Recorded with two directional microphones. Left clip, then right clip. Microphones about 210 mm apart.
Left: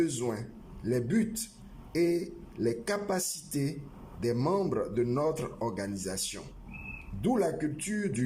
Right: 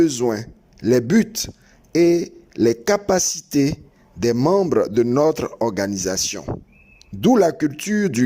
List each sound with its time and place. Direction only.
0.0 s speech: 40° right (ahead or behind)